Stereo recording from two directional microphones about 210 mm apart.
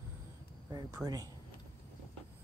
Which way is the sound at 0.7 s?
15° right (ahead or behind).